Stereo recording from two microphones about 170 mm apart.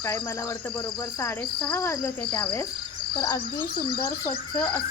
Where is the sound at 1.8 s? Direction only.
20° left (ahead or behind).